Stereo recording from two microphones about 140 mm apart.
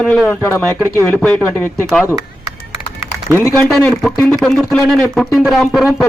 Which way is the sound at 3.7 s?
Centre (ahead or behind).